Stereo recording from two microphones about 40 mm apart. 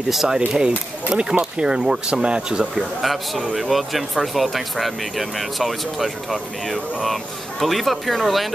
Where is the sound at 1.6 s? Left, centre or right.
Centre.